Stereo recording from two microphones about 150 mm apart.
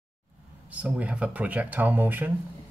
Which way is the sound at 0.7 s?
10° right (ahead or behind).